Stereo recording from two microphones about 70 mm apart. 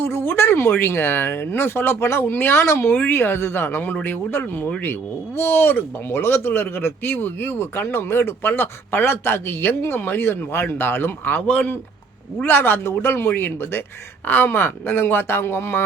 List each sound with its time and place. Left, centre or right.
0.0 s speech: left
12.4 s speech: left